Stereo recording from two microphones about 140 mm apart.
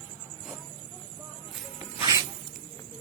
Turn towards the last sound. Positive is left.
turn(degrees=-25)  # may be behind; listen again after turning